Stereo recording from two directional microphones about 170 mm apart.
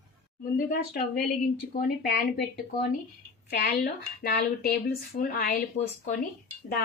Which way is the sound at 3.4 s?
70° left (ahead or behind).